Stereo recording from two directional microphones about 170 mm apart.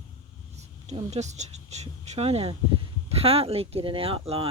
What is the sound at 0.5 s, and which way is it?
Speech, 40° right (ahead or behind).